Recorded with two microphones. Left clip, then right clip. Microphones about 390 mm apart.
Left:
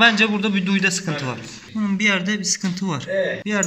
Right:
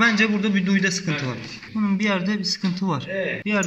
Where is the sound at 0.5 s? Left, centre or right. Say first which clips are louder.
Left 2 dB; left.